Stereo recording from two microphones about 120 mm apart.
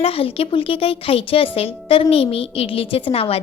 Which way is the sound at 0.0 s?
50° left (ahead or behind).